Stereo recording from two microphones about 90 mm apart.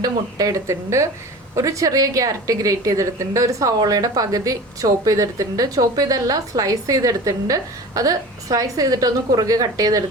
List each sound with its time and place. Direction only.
0.0 s a woman's voice: 40° right (ahead or behind)